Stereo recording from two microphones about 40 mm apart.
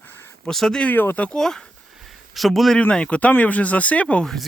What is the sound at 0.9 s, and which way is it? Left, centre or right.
Speech, left.